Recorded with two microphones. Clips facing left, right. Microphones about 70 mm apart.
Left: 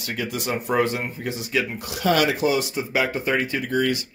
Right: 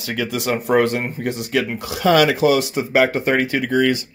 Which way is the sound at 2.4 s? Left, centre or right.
Right.